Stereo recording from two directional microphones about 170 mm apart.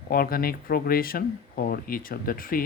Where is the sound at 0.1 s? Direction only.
60° left (ahead or behind).